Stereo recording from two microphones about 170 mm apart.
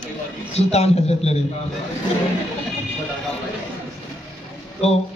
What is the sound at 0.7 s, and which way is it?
Speech, 40° left (ahead or behind).